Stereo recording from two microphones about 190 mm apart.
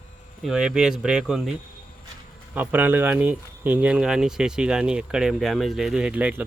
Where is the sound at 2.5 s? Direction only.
10° right (ahead or behind).